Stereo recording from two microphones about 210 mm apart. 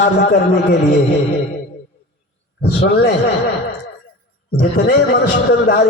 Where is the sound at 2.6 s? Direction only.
50° left (ahead or behind).